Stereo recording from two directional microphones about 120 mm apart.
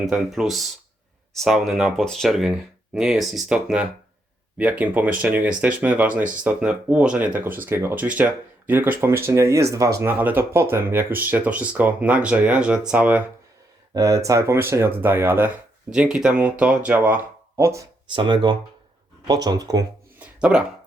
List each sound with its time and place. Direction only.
0.0 s speech: 5° right (ahead or behind)
13.9 s speech: 25° right (ahead or behind)
17.6 s speech: 25° right (ahead or behind)
18.1 s speech: 40° right (ahead or behind)
20.1 s a sound: 10° right (ahead or behind)